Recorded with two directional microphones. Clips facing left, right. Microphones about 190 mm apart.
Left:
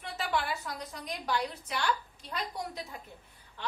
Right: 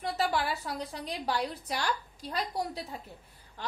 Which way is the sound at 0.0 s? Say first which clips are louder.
Right 7 dB; 35° right (ahead or behind).